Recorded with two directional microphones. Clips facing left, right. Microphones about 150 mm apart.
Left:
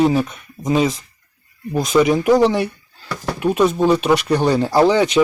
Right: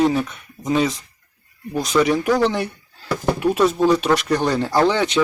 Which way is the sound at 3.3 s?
Centre (ahead or behind).